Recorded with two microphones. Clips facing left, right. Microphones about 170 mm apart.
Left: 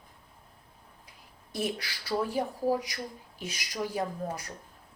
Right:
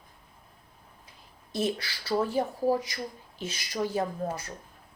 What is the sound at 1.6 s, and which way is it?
Speech, 10° left (ahead or behind).